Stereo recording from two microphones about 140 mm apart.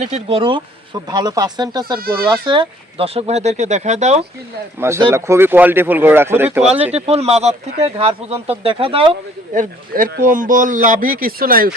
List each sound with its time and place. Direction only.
0.0 s speech: 50° right (ahead or behind)
0.3 s speech: 35° right (ahead or behind); by 4.3 s 50° right (ahead or behind)
4.8 s speech: 20° right (ahead or behind)
6.9 s speech: 50° right (ahead or behind)
9.6 s speech: 85° right